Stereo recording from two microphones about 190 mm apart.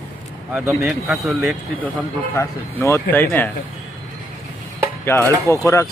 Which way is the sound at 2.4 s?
15° left (ahead or behind).